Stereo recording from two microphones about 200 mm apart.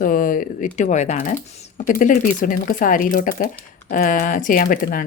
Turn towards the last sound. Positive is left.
turn(degrees=45)  # may be behind; listen again after turning